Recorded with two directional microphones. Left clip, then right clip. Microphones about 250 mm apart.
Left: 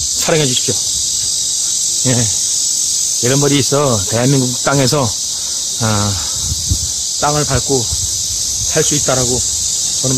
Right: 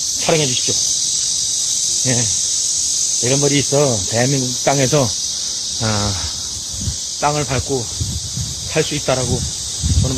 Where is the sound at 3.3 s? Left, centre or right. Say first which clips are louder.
Left 3 dB; centre.